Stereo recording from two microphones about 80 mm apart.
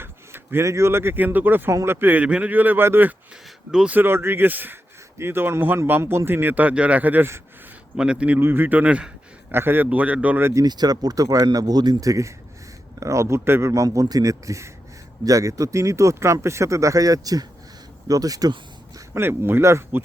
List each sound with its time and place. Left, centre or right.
0.0 s a sound: right
0.6 s a man's voice: right
3.7 s a man's voice: centre
3.9 s a man's voice: right
7.9 s a man's voice: centre
8.4 s a man's voice: right
9.5 s a man's voice: right
10.7 s speech: right
11.4 s speech: right
12.0 s speech: right
13.8 s speech: right
18.9 s speech: right